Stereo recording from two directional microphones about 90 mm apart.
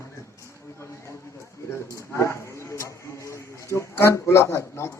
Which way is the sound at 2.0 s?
30° left (ahead or behind).